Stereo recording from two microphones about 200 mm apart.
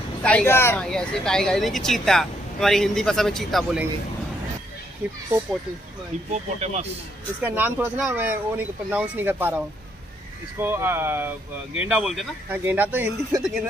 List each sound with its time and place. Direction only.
0.2 s speech: 5° left (ahead or behind)
5.0 s speech: 10° right (ahead or behind)
6.6 s speech: 35° right (ahead or behind)
7.4 s speech: 10° right (ahead or behind)